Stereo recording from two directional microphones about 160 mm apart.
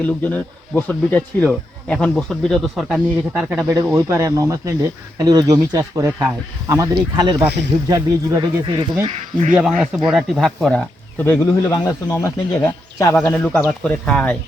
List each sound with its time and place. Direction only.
0.2 s speech: 10° left (ahead or behind)
3.7 s speech: 20° right (ahead or behind); by 9.6 s 40° right (ahead or behind)
9.6 s speech: 5° right (ahead or behind)
11.3 s speech: 15° left (ahead or behind)